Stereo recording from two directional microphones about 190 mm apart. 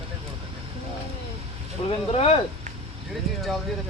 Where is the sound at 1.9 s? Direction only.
30° left (ahead or behind).